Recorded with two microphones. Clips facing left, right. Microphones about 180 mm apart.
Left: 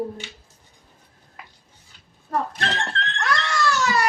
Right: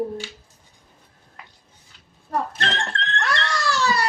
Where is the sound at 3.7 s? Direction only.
30° right (ahead or behind).